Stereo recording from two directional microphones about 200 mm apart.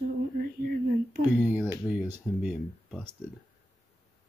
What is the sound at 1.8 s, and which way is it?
Speech, 10° right (ahead or behind).